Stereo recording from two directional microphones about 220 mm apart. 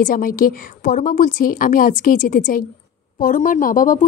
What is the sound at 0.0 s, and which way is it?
A woman's voice, 40° left (ahead or behind).